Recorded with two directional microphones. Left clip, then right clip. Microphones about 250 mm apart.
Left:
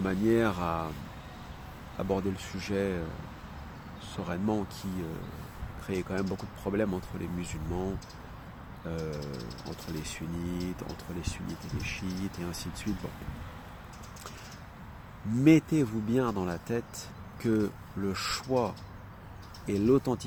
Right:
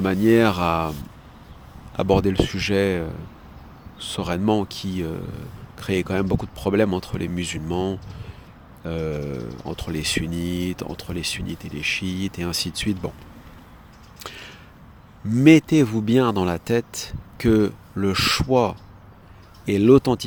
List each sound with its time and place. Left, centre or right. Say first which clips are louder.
0.0 s speech: right 10 dB; right
2.0 s speech: right 13 dB; right
4.1 s speech: right 10 dB; right
15.3 s speech: right 9 dB; right